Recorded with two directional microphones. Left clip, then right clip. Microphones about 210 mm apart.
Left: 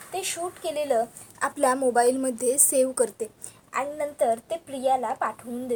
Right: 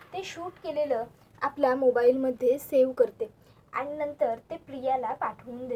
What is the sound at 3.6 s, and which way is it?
A woman's voice, 45° left (ahead or behind).